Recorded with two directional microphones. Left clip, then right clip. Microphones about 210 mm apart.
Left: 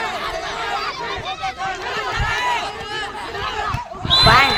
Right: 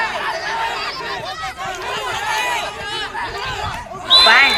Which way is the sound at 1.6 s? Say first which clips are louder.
Right 1 dB; 45° right (ahead or behind).